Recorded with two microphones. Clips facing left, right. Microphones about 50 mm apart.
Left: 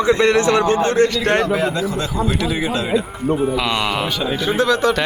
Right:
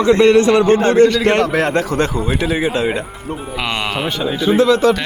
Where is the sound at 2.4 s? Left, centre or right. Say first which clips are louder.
Right 3 dB; right.